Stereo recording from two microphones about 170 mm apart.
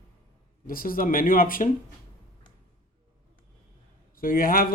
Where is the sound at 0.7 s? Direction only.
55° left (ahead or behind).